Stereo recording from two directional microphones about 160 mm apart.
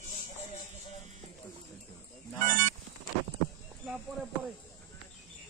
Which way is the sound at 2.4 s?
55° right (ahead or behind).